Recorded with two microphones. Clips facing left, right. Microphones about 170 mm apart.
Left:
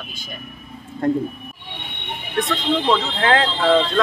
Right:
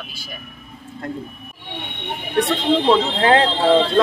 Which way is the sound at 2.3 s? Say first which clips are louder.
Right 3 dB; 30° right (ahead or behind).